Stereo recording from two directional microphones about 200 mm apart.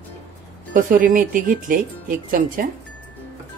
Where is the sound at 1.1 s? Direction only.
45° right (ahead or behind).